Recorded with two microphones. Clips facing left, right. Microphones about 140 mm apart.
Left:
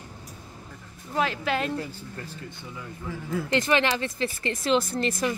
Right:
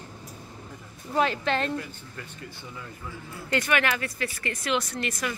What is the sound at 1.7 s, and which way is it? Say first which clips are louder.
Speech: left 1 dB; 35° left (ahead or behind).